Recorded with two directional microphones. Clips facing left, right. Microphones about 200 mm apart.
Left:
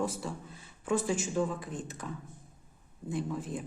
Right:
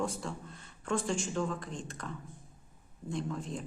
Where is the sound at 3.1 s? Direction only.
5° left (ahead or behind).